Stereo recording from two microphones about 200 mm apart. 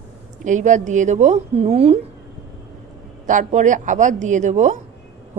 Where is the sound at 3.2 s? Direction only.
40° right (ahead or behind).